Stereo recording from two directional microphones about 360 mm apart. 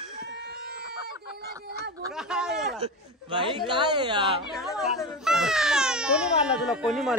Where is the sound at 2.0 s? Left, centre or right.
Centre.